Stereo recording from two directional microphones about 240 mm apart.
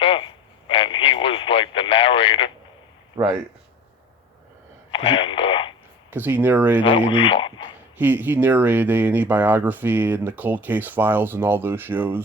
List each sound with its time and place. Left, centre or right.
0.0 s radio: left
3.2 s speech: centre
4.9 s radio: left
6.1 s speech: centre
7.1 s speech: left
7.9 s speech: centre